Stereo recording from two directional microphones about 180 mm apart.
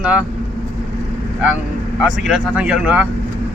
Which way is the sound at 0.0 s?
5° right (ahead or behind).